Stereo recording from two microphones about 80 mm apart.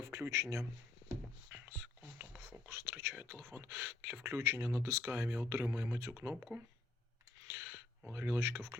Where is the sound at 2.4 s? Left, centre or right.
Right.